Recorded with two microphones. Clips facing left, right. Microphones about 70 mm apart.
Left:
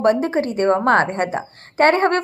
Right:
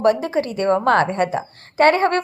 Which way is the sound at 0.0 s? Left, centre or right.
Left.